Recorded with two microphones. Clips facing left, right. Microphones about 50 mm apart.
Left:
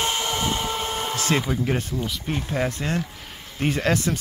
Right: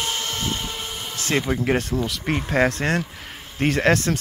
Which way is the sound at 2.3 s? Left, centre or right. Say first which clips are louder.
Right 6 dB; right.